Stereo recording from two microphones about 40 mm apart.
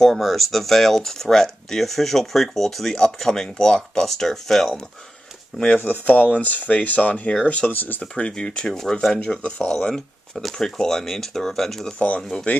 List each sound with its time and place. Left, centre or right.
0.0 s speech: centre
5.5 s speech: centre
6.0 s speech: left
7.7 s speech: left
8.0 s speech: left